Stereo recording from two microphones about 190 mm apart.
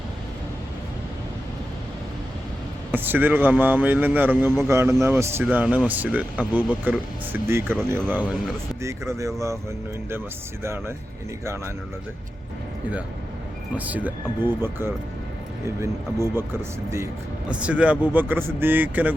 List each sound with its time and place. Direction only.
2.9 s a man's voice: 10° right (ahead or behind)
10.6 s a man's voice: 15° right (ahead or behind)
13.7 s a man's voice: 10° right (ahead or behind)
17.5 s a man's voice: 5° right (ahead or behind)